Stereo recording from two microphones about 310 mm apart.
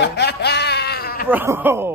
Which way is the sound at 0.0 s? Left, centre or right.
Left.